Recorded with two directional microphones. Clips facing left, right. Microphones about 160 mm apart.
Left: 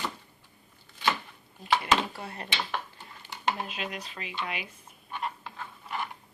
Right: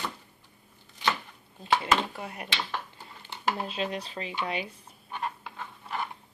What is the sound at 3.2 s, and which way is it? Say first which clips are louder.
Speech: right 1 dB; 30° right (ahead or behind).